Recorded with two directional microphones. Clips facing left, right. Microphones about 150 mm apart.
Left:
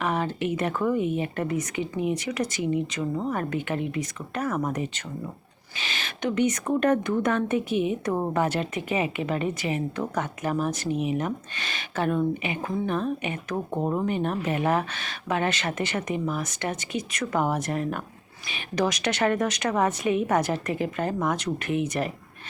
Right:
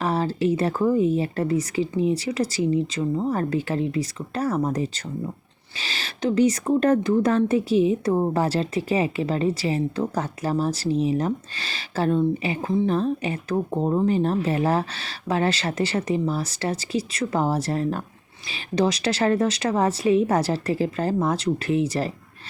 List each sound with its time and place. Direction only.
0.0 s speech: 35° right (ahead or behind)